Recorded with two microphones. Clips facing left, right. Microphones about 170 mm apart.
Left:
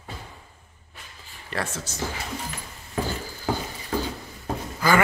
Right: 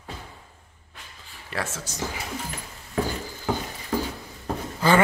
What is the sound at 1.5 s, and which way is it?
Speech, 10° right (ahead or behind).